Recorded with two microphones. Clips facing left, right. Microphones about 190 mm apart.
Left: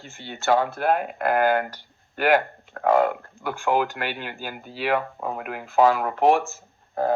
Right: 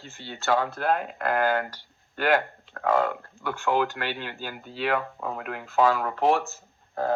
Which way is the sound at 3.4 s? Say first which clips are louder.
Left 2 dB; 10° left (ahead or behind).